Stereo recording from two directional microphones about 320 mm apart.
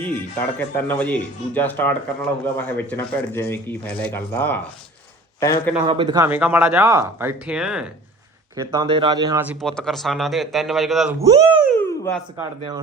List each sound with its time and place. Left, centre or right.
0.0 s speech: centre
5.9 s speech: centre
9.6 s speech: centre
11.8 s a sound: centre
12.4 s speech: centre